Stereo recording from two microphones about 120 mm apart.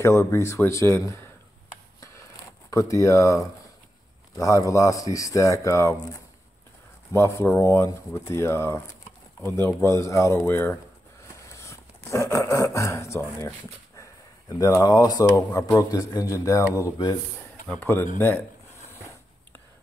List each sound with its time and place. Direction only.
0.0 s speech: 25° left (ahead or behind)
2.7 s speech: 25° left (ahead or behind)
7.1 s speech: 25° left (ahead or behind)